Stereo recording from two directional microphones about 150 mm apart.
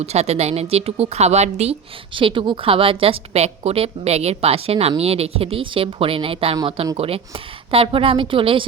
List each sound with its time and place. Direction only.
0.0 s a woman's voice: 45° right (ahead or behind)
2.1 s a woman's voice: 35° right (ahead or behind)